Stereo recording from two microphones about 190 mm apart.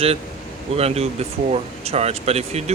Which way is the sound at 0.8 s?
35° right (ahead or behind).